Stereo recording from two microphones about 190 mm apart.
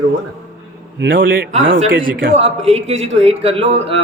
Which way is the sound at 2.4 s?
35° right (ahead or behind).